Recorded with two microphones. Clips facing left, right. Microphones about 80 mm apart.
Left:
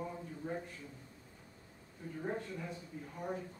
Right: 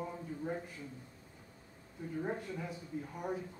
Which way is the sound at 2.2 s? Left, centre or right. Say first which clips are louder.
Right 1 dB; centre.